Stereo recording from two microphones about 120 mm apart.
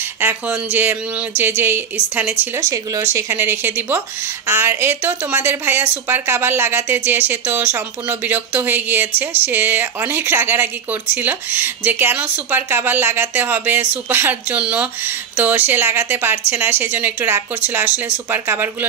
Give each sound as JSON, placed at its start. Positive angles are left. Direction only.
{"t": 0.2, "sound": "speech", "side_deg": -15}